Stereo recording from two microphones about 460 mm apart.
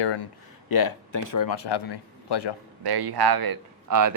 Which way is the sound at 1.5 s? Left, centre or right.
Left.